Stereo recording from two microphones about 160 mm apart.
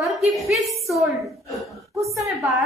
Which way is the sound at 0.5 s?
Centre (ahead or behind).